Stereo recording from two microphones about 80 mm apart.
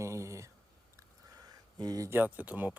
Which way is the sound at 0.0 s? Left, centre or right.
Right.